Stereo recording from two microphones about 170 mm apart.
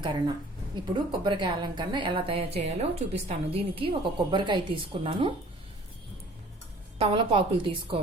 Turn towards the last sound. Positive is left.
turn(degrees=-30)  # may be behind; listen again after turning